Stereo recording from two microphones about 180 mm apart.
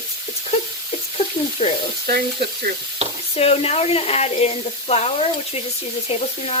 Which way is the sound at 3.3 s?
35° left (ahead or behind).